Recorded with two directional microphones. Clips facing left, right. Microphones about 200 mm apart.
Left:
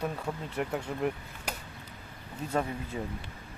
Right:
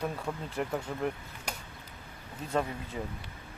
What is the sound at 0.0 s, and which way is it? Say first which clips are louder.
Speech: left 1 dB; 5° left (ahead or behind).